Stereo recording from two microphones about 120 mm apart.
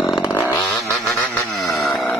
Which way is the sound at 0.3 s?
20° left (ahead or behind).